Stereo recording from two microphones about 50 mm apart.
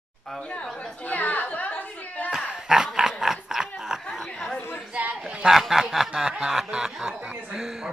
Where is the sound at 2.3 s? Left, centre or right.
Centre.